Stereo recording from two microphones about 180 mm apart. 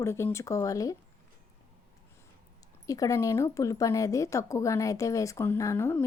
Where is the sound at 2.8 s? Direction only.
20° left (ahead or behind).